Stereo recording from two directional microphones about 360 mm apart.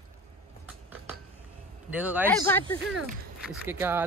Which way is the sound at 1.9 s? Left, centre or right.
Centre.